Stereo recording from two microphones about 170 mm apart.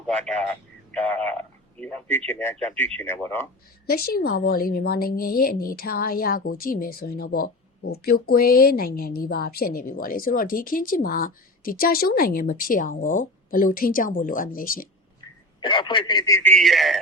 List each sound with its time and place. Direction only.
0.9 s speech: 10° left (ahead or behind)
3.8 s a woman's voice: 65° left (ahead or behind)
15.6 s speech: 30° left (ahead or behind); by 17.0 s centre (ahead or behind)